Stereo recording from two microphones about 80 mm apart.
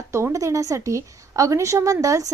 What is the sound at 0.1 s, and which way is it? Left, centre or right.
A woman's voice, right.